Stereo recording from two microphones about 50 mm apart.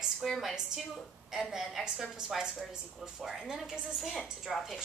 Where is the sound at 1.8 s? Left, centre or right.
Centre.